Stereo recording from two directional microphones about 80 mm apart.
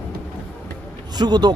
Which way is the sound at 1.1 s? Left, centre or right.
Right.